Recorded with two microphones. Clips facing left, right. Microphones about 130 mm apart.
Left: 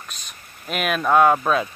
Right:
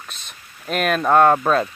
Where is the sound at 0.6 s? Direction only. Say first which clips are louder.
Right 3 dB; 5° left (ahead or behind).